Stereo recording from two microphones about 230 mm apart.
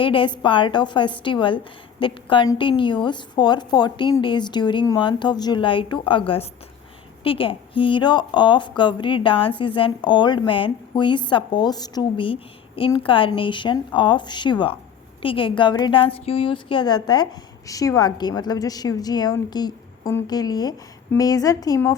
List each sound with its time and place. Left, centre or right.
0.0 s a woman's voice: left